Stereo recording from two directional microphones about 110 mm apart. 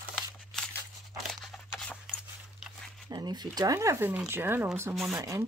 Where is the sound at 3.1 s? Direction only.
40° right (ahead or behind).